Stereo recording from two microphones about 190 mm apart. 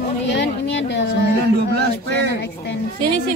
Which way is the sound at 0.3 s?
70° left (ahead or behind).